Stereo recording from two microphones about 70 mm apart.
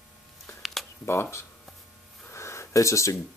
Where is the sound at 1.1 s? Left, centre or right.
Left.